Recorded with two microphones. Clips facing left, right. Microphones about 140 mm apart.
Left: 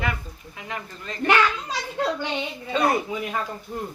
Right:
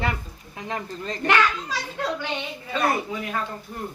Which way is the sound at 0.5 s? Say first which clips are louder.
Right 4 dB; 35° right (ahead or behind).